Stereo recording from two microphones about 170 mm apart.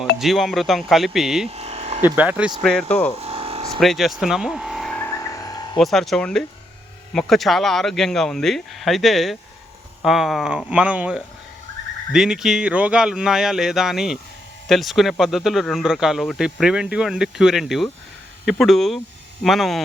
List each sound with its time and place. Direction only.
0.2 s speech: centre (ahead or behind)
1.5 s a sound: 35° right (ahead or behind)
2.0 s speech: 10° right (ahead or behind)
2.6 s speech: 5° left (ahead or behind)
3.2 s a sound: 35° right (ahead or behind)
3.8 s frog: centre (ahead or behind); by 5.8 s 20° left (ahead or behind)
5.8 s speech: centre (ahead or behind)